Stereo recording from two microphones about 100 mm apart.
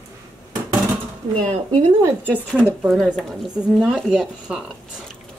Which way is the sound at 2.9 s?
5° left (ahead or behind).